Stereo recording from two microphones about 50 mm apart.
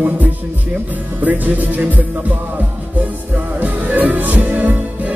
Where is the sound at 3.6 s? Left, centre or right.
Right.